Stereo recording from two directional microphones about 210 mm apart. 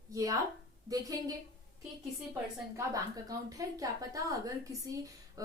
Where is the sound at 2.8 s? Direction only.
15° right (ahead or behind).